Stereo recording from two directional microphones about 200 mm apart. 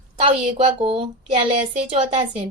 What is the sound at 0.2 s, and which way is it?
A woman's voice, 30° right (ahead or behind).